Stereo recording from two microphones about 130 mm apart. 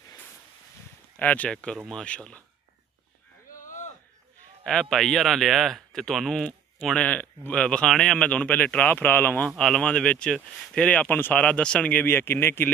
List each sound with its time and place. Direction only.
1.1 s speech: 15° left (ahead or behind)
3.4 s a sound: 85° left
4.6 s speech: 5° left (ahead or behind)